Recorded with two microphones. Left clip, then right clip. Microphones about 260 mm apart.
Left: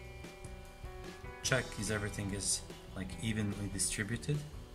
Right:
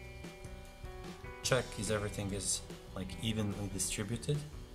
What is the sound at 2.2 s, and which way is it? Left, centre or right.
Speech, centre.